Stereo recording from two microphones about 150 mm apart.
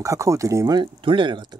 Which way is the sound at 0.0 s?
20° right (ahead or behind).